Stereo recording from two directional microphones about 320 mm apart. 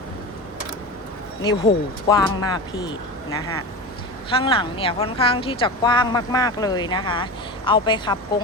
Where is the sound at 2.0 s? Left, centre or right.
Centre.